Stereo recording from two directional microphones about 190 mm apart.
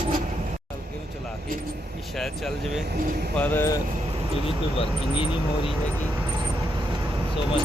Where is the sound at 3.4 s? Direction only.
15° left (ahead or behind).